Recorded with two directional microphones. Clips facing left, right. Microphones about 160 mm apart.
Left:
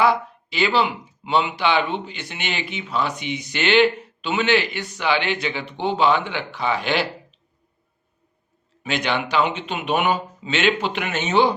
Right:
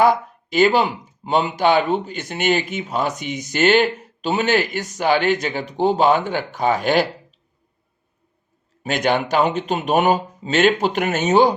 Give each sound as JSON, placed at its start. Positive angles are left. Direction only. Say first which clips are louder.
{"t": 0.0, "sound": "speech", "louder": "right 3 dB", "side_deg": -45}
{"t": 8.8, "sound": "speech", "louder": "right 4 dB", "side_deg": -45}